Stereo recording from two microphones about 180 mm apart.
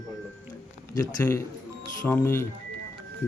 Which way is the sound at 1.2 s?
15° left (ahead or behind).